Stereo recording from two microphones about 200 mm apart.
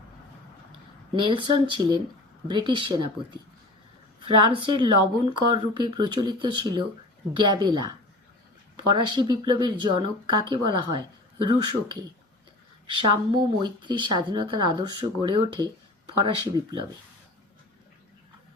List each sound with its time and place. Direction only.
1.1 s speech: 25° right (ahead or behind)
4.2 s speech: 25° right (ahead or behind)
13.1 s speech: 20° right (ahead or behind)